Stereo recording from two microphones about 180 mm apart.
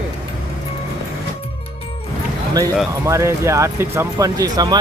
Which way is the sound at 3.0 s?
15° right (ahead or behind).